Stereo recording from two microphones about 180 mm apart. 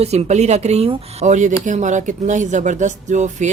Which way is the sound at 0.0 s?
35° right (ahead or behind).